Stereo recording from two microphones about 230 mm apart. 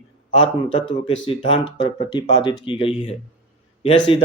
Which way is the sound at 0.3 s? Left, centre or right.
Left.